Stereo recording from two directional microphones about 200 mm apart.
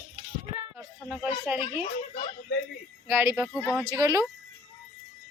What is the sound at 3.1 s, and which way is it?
Speech, 10° right (ahead or behind).